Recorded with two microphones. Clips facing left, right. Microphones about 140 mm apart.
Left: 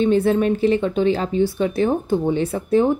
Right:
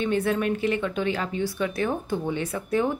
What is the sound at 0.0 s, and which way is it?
A woman's voice, 30° left (ahead or behind).